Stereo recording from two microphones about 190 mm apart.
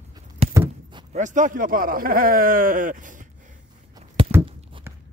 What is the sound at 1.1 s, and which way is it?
A man's voice, 40° right (ahead or behind).